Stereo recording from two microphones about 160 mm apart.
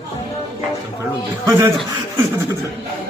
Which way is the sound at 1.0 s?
20° right (ahead or behind).